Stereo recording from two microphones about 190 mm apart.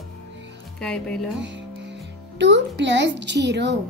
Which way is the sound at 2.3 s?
65° right (ahead or behind).